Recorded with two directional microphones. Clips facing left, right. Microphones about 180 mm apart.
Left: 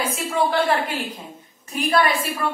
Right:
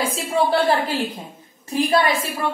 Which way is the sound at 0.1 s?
30° right (ahead or behind).